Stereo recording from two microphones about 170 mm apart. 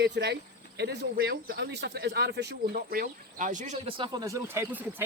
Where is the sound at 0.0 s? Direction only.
80° right; by 3.8 s 50° right (ahead or behind).